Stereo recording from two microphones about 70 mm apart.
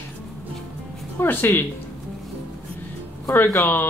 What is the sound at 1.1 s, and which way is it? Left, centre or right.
Speech, left.